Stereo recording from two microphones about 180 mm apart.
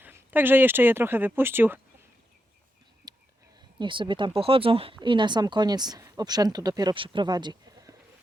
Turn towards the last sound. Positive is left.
turn(degrees=-20)  # may be behind; listen again after turning